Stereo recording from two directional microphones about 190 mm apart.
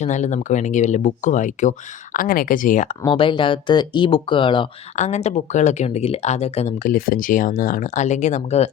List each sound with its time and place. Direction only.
0.0 s speech: 40° left (ahead or behind)
3.0 s speech: 25° left (ahead or behind)
4.9 s speech: 35° left (ahead or behind)